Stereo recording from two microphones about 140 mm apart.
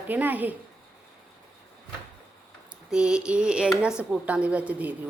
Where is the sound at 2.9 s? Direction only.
5° right (ahead or behind).